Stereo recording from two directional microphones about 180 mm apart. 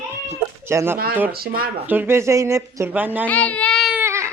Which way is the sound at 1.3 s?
55° right (ahead or behind).